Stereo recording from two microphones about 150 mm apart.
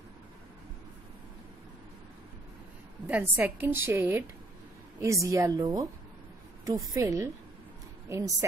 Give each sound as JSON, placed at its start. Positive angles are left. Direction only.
{"t": 3.1, "sound": "a woman's voice", "side_deg": -10}
{"t": 6.9, "sound": "a woman's voice", "side_deg": -20}